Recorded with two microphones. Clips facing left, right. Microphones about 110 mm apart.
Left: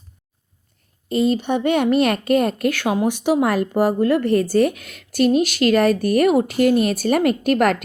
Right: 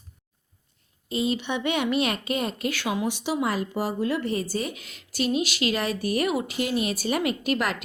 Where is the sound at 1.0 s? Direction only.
50° left (ahead or behind).